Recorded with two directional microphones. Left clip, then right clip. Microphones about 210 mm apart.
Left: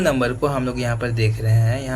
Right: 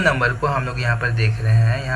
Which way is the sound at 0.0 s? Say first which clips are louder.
Right 1 dB; 55° left (ahead or behind).